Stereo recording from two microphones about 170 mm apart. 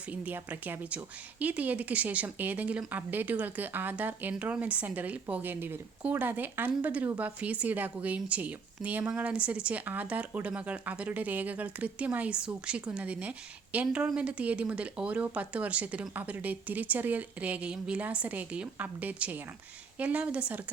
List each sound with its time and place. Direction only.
0.1 s speech: 10° right (ahead or behind)